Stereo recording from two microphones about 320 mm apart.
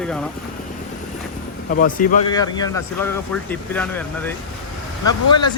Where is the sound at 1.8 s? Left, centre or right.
Left.